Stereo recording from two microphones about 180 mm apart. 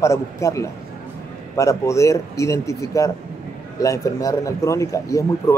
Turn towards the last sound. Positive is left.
turn(degrees=15)  # may be behind; listen again after turning